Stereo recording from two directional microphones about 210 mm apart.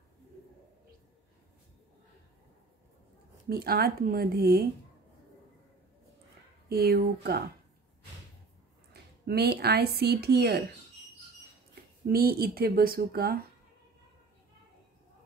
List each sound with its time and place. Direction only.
3.4 s speech: 45° right (ahead or behind)
6.7 s speech: 45° right (ahead or behind)
8.9 s a woman's voice: 50° right (ahead or behind)
12.1 s speech: 45° right (ahead or behind)